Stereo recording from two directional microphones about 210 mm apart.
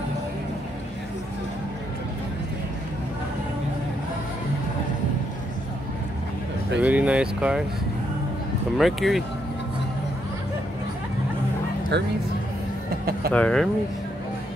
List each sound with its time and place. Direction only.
6.8 s speech: 5° right (ahead or behind)
8.7 s speech: centre (ahead or behind)
11.9 s speech: 55° right (ahead or behind)
13.3 s speech: 5° left (ahead or behind)